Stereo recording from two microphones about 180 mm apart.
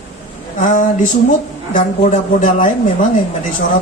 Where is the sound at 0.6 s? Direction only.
45° left (ahead or behind).